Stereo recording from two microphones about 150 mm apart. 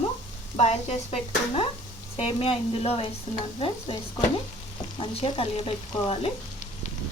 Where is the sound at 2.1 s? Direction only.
40° left (ahead or behind).